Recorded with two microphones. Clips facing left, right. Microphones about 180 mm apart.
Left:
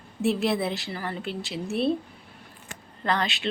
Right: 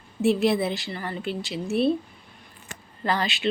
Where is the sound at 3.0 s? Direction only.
5° right (ahead or behind).